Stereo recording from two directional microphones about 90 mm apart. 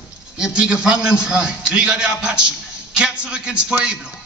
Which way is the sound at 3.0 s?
10° right (ahead or behind).